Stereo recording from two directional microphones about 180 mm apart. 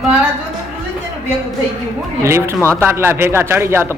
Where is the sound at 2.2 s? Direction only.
15° right (ahead or behind).